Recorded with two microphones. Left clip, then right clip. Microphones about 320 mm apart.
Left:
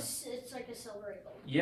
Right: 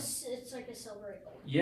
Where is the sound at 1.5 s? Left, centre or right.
Centre.